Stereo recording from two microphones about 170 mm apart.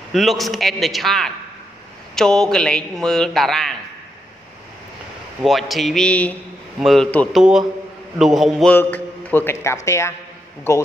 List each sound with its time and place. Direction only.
0.1 s speech: centre (ahead or behind)
5.4 s speech: centre (ahead or behind)
8.7 s a man's voice: 10° left (ahead or behind)